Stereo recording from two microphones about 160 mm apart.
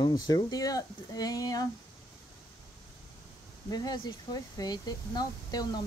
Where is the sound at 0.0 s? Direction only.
25° left (ahead or behind).